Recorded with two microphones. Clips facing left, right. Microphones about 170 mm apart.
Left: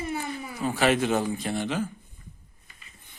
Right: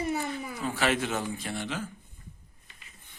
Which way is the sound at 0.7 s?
20° left (ahead or behind).